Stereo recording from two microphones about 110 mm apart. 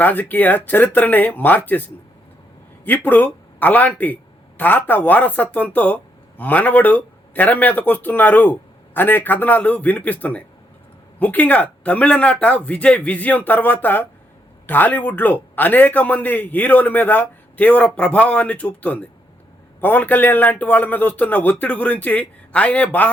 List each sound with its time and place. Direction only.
0.0 s a man's voice: 15° left (ahead or behind)
2.8 s a man's voice: 15° left (ahead or behind)